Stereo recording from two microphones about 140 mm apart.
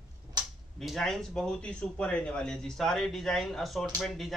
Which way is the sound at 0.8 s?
Centre (ahead or behind).